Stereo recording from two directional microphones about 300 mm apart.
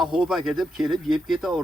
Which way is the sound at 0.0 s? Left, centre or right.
Centre.